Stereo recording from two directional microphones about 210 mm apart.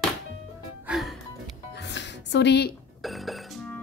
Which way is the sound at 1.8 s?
55° left (ahead or behind).